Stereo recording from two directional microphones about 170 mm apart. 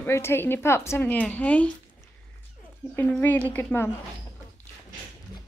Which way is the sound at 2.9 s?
10° left (ahead or behind).